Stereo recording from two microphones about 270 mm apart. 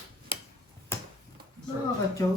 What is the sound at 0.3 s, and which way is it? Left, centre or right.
Tick-tock, centre.